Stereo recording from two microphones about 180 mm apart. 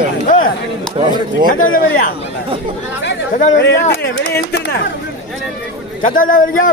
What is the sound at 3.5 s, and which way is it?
Speech, 70° left (ahead or behind).